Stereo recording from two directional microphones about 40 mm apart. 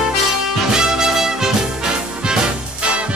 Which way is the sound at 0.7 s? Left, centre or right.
Centre.